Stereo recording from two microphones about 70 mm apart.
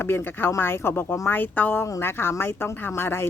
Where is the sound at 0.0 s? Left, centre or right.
Left.